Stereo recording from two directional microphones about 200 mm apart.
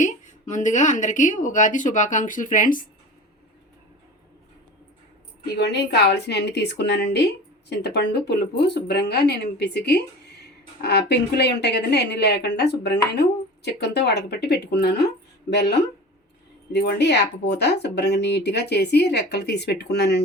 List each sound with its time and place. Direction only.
0.0 s speech: 40° left (ahead or behind)
5.5 s speech: 60° left (ahead or behind)
16.7 s speech: 55° left (ahead or behind)